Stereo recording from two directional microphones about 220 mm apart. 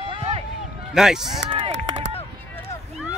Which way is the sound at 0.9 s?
5° right (ahead or behind).